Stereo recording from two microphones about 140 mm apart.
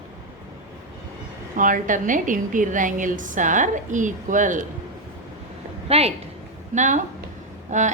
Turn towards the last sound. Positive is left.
turn(degrees=-60)  # may be behind; listen again after turning